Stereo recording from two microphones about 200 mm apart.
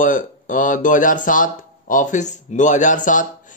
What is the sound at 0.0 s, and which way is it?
Speech, 40° left (ahead or behind).